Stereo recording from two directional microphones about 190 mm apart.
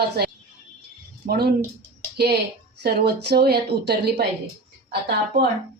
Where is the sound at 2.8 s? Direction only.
60° right (ahead or behind).